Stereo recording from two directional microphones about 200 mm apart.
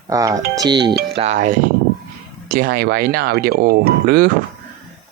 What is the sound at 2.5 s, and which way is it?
Speech, 50° right (ahead or behind).